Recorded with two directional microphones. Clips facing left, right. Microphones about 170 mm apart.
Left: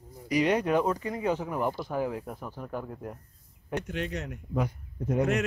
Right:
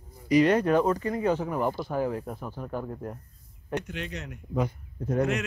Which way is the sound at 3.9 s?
45° left (ahead or behind).